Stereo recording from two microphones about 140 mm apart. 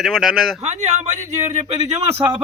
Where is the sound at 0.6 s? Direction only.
50° right (ahead or behind).